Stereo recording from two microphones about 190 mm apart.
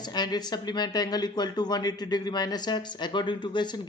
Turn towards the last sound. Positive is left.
turn(degrees=25)  # may be behind; listen again after turning